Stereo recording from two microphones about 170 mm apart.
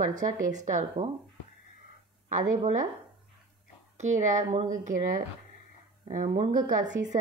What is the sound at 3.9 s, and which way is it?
Speech, 45° right (ahead or behind).